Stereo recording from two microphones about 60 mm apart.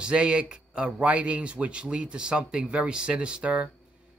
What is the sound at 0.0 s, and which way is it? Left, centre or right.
A man's voice, centre.